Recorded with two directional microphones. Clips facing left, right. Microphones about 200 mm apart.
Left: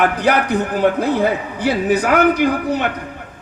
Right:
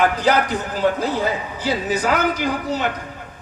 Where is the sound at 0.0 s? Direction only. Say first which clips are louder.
Left 1 dB; 60° left (ahead or behind).